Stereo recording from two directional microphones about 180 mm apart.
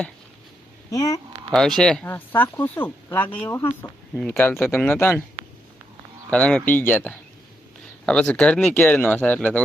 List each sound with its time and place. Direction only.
0.9 s speech: 20° left (ahead or behind)
1.5 s speech: centre (ahead or behind)
6.3 s speech: 5° left (ahead or behind)